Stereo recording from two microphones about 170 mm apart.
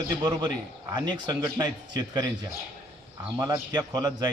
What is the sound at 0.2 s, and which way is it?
A man's voice, 25° right (ahead or behind).